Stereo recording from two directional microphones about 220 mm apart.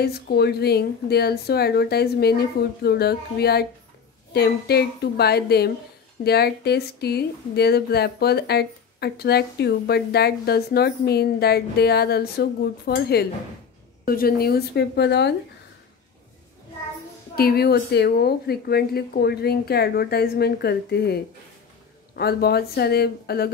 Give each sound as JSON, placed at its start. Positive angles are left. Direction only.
{"t": 0.0, "sound": "speech", "side_deg": 45}
{"t": 17.4, "sound": "speech", "side_deg": 45}